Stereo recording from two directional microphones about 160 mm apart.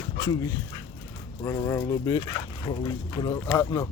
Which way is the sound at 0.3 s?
20° left (ahead or behind).